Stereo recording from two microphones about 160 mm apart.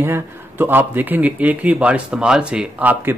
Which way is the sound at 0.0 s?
15° right (ahead or behind).